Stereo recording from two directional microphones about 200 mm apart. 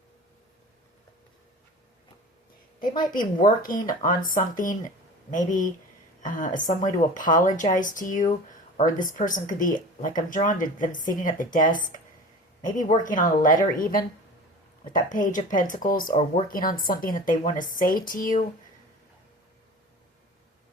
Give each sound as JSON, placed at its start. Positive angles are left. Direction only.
{"t": 3.0, "sound": "speech", "side_deg": 45}